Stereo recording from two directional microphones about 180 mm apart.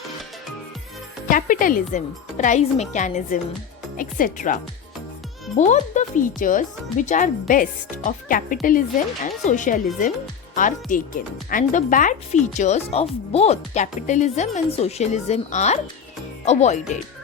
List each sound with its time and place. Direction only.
1.3 s speech: 50° left (ahead or behind)
5.5 s speech: 40° left (ahead or behind)